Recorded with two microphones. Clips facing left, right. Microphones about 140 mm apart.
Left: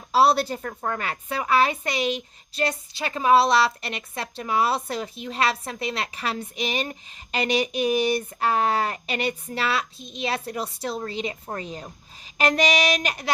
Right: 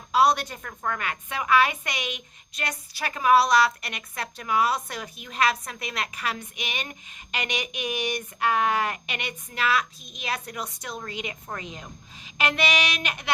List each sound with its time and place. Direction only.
0.1 s a woman's voice: 30° left (ahead or behind)